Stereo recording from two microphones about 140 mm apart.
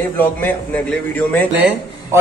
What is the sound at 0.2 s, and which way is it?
A man's voice, 15° left (ahead or behind).